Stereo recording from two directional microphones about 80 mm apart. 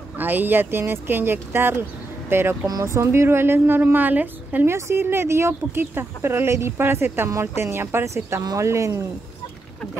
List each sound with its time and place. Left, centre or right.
0.2 s a woman's voice: right
4.6 s speech: right